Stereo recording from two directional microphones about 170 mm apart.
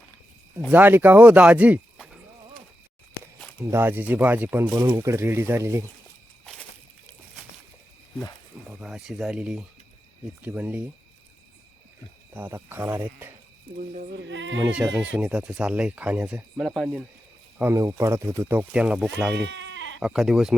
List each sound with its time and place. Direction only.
0.7 s speech: 10° right (ahead or behind)
3.6 s speech: 15° right (ahead or behind)
4.7 s speech: 20° right (ahead or behind)
8.6 s speech: 5° right (ahead or behind)
12.3 s speech: 10° right (ahead or behind)
13.7 s speech: 55° right (ahead or behind)
14.1 s speech: 90° right
14.6 s speech: 5° right (ahead or behind)
17.6 s speech: 15° right (ahead or behind)
19.3 s goat: 90° right
20.0 s speech: centre (ahead or behind)